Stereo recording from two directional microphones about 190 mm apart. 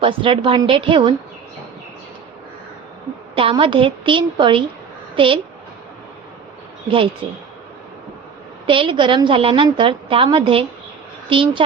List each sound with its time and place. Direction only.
0.0 s a woman's voice: 25° right (ahead or behind)
3.3 s a woman's voice: 30° right (ahead or behind)
8.6 s a woman's voice: 25° right (ahead or behind)